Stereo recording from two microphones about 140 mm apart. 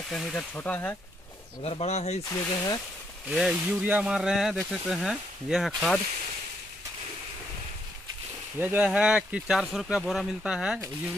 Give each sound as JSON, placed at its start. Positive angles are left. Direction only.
{"t": 0.1, "sound": "speech", "side_deg": 5}
{"t": 1.6, "sound": "speech", "side_deg": 45}
{"t": 2.5, "sound": "speech", "side_deg": 25}
{"t": 3.3, "sound": "speech", "side_deg": -5}
{"t": 8.5, "sound": "speech", "side_deg": -10}